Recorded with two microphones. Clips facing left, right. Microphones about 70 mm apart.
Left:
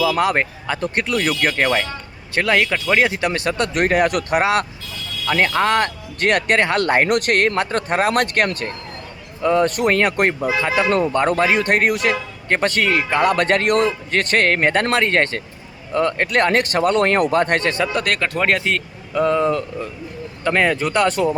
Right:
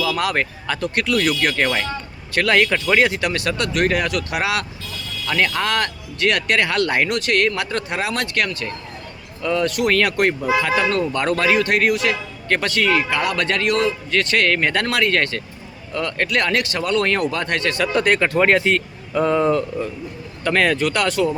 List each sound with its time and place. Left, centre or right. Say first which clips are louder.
0.2 s speech: left 3 dB; left
5.2 s speech: left 3 dB; left
9.4 s speech: left 3 dB; left
17.9 s speech: right 4 dB; centre
20.4 s speech: even; centre